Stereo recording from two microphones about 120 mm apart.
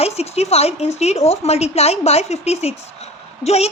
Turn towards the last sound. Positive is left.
turn(degrees=60)  # may be behind; listen again after turning